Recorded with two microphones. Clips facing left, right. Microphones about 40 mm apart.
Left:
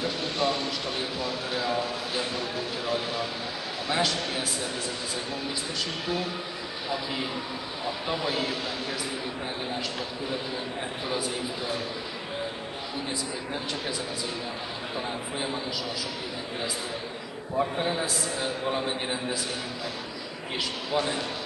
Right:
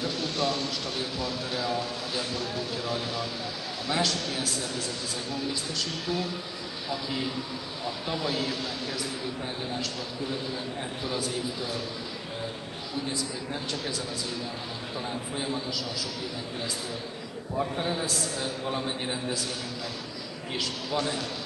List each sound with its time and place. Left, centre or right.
0.0 s speech: centre
6.0 s speech: centre
7.8 s speech: centre
11.1 s speech: centre
15.3 s speech: centre
17.6 s speech: centre
20.5 s speech: centre